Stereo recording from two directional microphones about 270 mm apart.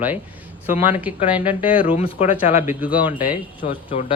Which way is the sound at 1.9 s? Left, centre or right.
Left.